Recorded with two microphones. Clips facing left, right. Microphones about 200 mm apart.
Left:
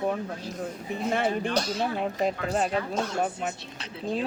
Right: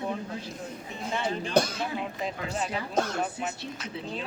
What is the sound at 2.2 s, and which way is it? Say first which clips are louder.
Speech: left 8 dB; 45° left (ahead or behind).